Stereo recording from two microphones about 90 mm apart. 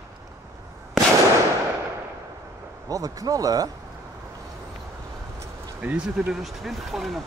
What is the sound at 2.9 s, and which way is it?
Speech, 40° right (ahead or behind).